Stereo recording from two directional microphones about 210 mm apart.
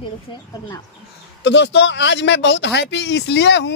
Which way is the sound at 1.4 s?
55° left (ahead or behind).